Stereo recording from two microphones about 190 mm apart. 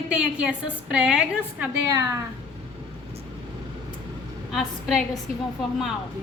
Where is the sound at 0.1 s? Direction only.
5° right (ahead or behind).